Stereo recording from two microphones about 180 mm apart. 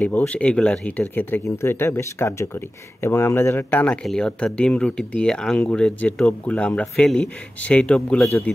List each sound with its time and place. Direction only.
0.0 s speech: 10° left (ahead or behind)